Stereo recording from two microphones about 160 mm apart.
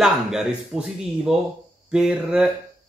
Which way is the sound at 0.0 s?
5° right (ahead or behind).